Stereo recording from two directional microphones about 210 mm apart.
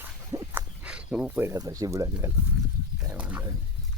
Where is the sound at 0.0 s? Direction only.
10° right (ahead or behind).